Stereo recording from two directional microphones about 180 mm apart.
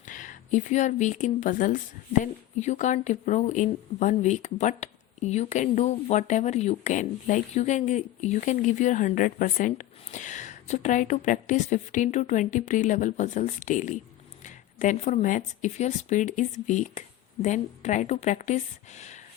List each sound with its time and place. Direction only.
0.0 s a woman's voice: 45° left (ahead or behind)